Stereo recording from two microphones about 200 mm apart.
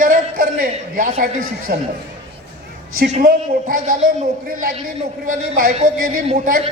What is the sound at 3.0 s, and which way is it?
Speech, 45° right (ahead or behind).